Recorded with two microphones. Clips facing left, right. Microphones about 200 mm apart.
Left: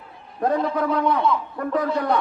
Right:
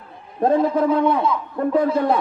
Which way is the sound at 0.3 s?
25° right (ahead or behind).